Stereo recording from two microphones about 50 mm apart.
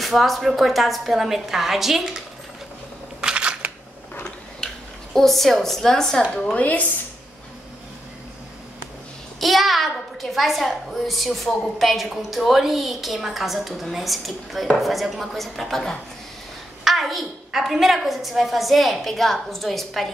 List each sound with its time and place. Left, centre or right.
0.0 s a child's voice: centre
3.2 s a sound: right
5.1 s a woman's voice: centre
6.5 s speech: left
9.4 s a child's voice: centre